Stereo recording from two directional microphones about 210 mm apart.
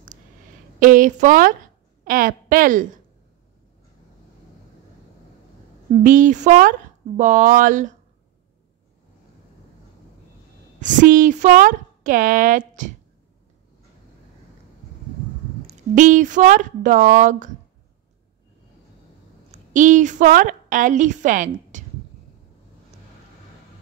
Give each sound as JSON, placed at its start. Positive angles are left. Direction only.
{"t": 0.7, "sound": "speech", "side_deg": -40}
{"t": 5.9, "sound": "speech", "side_deg": -40}
{"t": 10.8, "sound": "speech", "side_deg": -40}
{"t": 15.6, "sound": "speech", "side_deg": -40}
{"t": 19.5, "sound": "a woman's voice", "side_deg": -35}